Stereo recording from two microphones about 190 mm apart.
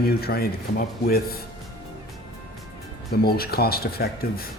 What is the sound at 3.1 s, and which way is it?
Speech, 55° left (ahead or behind).